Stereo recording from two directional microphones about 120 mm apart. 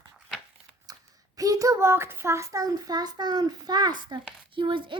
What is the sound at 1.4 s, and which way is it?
A child's voice, 30° right (ahead or behind).